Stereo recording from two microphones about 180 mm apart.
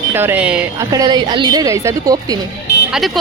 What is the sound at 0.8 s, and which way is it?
A woman's voice, 20° right (ahead or behind).